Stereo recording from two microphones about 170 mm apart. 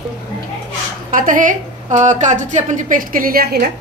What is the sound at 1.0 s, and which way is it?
A woman's voice, 50° right (ahead or behind).